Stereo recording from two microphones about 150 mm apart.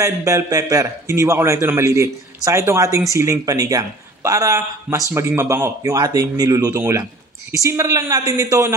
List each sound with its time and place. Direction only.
0.0 s a man's voice: 20° right (ahead or behind)